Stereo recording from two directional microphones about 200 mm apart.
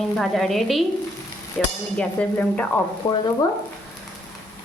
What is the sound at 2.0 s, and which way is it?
Speech, 10° left (ahead or behind).